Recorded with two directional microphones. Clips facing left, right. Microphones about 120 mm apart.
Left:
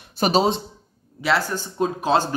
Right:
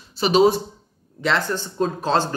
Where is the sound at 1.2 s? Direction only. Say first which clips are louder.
Even; 10° left (ahead or behind).